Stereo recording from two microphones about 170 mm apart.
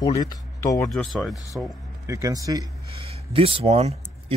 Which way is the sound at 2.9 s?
35° right (ahead or behind).